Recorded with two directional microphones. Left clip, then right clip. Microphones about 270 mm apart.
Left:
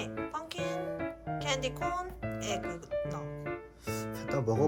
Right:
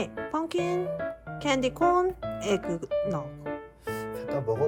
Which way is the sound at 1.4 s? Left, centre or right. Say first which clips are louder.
Right 9 dB; right.